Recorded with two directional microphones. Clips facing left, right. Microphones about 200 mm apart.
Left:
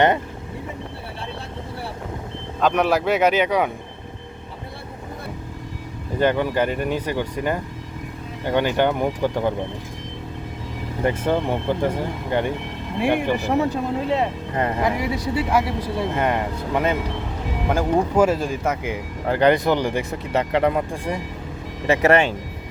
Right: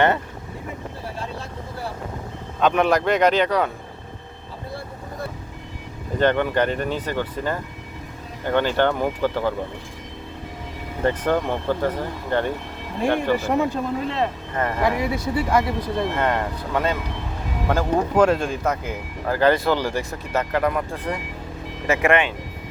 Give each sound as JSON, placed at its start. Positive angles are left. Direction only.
{"t": 2.6, "sound": "speech", "side_deg": 0}
{"t": 6.1, "sound": "speech", "side_deg": 10}
{"t": 11.3, "sound": "speech", "side_deg": 15}
{"t": 20.9, "sound": "speech", "side_deg": 10}
{"t": 21.8, "sound": "speech", "side_deg": 35}